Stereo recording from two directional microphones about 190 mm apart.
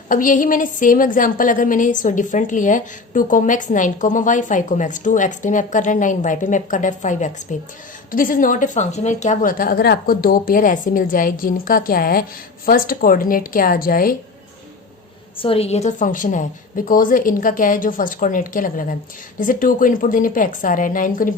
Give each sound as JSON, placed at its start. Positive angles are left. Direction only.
{"t": 0.1, "sound": "a woman's voice", "side_deg": 45}
{"t": 15.4, "sound": "a woman's voice", "side_deg": 30}